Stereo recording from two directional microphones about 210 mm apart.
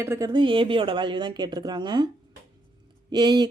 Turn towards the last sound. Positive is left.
turn(degrees=-20)  # may be behind; listen again after turning